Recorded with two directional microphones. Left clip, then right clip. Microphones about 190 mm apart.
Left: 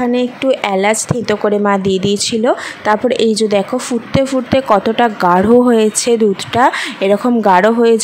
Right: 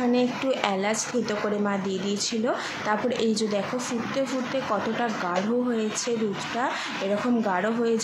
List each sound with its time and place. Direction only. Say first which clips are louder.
0.1 s speech: left 10 dB; 40° left (ahead or behind)